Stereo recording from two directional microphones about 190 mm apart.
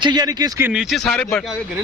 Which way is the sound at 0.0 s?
25° right (ahead or behind).